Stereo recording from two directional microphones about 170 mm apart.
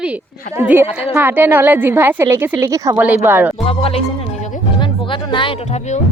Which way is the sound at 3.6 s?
35° left (ahead or behind).